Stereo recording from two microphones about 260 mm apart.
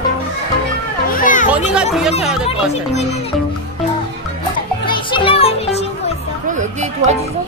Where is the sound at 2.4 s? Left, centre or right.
Left.